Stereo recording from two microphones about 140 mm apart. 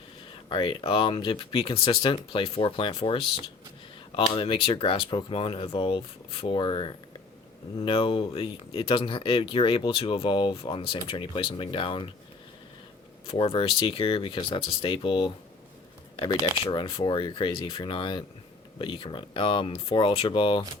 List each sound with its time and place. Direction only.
0.4 s speech: 35° left (ahead or behind)
13.2 s speech: 40° left (ahead or behind)